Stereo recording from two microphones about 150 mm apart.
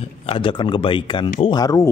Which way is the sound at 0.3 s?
35° left (ahead or behind).